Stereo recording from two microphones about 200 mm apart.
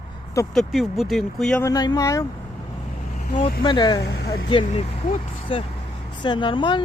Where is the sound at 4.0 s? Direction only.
55° left (ahead or behind).